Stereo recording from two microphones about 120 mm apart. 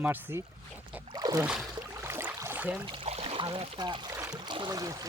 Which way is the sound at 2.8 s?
45° right (ahead or behind).